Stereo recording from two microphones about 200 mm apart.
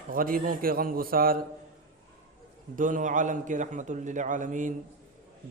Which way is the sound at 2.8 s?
40° right (ahead or behind).